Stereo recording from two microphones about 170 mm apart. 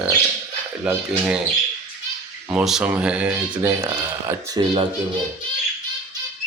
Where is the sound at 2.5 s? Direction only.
5° right (ahead or behind).